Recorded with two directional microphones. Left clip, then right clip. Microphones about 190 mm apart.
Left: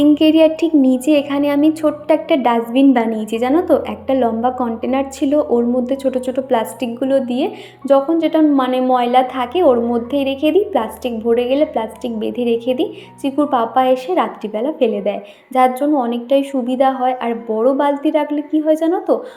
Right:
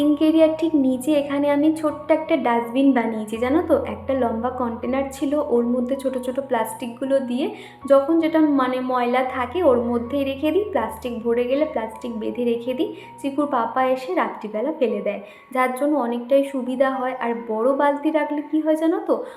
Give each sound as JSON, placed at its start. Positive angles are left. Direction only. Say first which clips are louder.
{"t": 0.0, "sound": "a woman's voice", "louder": "left 6 dB", "side_deg": 35}